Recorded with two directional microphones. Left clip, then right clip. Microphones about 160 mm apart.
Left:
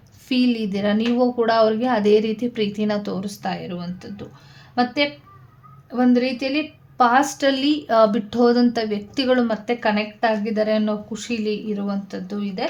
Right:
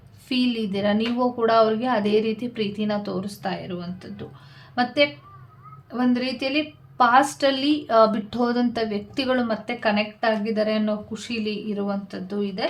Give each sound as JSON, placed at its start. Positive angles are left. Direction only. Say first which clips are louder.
{"t": 0.3, "sound": "a woman's voice", "louder": "left 3 dB", "side_deg": 30}